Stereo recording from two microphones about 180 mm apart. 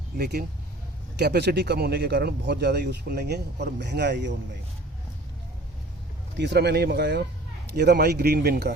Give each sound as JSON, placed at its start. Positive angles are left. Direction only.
{"t": 0.2, "sound": "a man's voice", "side_deg": -60}
{"t": 6.3, "sound": "a man's voice", "side_deg": -70}